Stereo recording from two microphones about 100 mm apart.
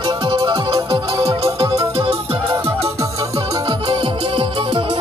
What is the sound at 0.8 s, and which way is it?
Music, 80° right.